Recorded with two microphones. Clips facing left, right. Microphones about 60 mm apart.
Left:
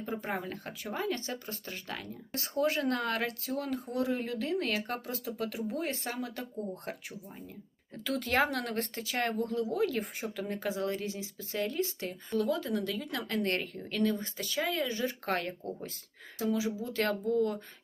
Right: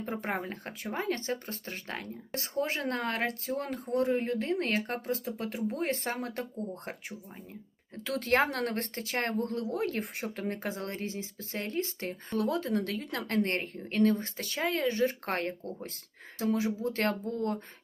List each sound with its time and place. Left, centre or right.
0.0 s speech: right
6.9 s speech: right
8.0 s speech: right